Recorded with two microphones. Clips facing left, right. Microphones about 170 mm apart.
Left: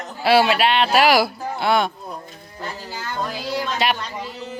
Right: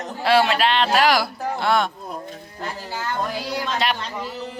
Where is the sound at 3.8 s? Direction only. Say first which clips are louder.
Left 3 dB; 5° left (ahead or behind).